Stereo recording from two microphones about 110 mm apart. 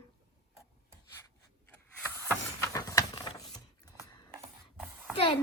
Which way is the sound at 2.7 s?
30° left (ahead or behind).